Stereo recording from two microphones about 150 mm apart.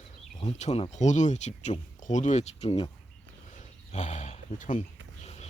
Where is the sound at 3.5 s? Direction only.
50° left (ahead or behind).